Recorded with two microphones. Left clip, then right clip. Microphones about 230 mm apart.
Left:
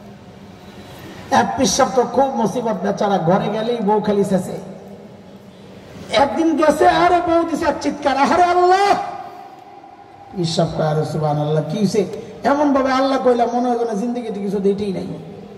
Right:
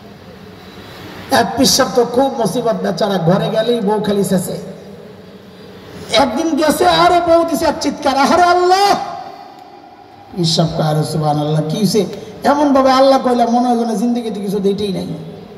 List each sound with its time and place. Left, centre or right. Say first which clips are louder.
1.3 s a man's voice: right 3 dB; right
6.0 s a man's voice: right 2 dB; right
10.4 s a man's voice: right 3 dB; right